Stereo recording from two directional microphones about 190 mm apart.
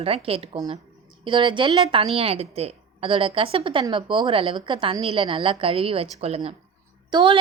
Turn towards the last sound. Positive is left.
turn(degrees=-25)  # may be behind; listen again after turning